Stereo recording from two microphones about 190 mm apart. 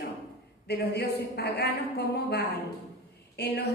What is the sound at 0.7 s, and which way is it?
A woman's voice, 60° left (ahead or behind).